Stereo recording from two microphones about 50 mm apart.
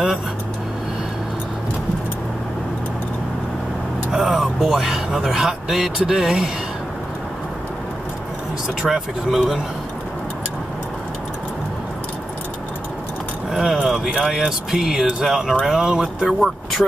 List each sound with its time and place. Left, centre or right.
4.1 s speech: centre
8.9 s speech: centre
13.5 s vehicle: centre
13.8 s speech: centre
16.3 s speech: centre